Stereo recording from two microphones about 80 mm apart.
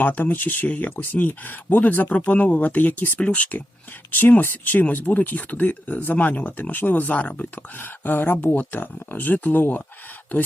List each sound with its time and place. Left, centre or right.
0.0 s speech: left